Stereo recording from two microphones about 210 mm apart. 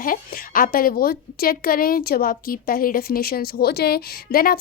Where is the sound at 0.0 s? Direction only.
45° left (ahead or behind).